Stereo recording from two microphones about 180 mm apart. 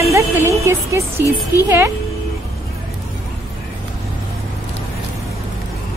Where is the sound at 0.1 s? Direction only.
15° right (ahead or behind).